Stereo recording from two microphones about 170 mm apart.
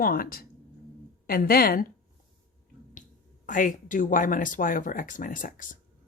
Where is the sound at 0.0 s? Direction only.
60° left (ahead or behind).